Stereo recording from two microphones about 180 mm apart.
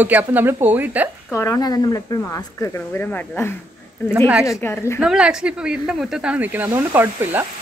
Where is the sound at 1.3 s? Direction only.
15° left (ahead or behind).